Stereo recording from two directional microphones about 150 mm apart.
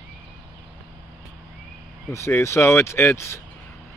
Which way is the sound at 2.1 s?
20° left (ahead or behind).